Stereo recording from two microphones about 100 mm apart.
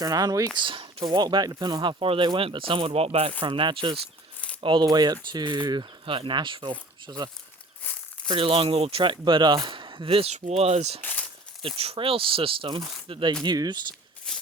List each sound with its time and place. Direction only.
0.0 s speech: 40° right (ahead or behind)
0.5 s speech: 55° right (ahead or behind); by 3.3 s 75° right (ahead or behind)
3.4 s speech: 55° right (ahead or behind)
6.1 s speech: 60° right (ahead or behind)
7.8 s crumpling: 15° left (ahead or behind)
8.3 s speech: 65° right (ahead or behind); by 11.0 s 90° right
11.0 s a sound: 15° left (ahead or behind)
11.8 s speech: 75° right (ahead or behind)
13.4 s speech: 45° right (ahead or behind)
14.3 s a sound: 5° left (ahead or behind)